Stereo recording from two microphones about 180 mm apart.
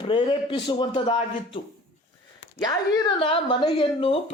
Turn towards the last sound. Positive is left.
turn(degrees=30)  # may be behind; listen again after turning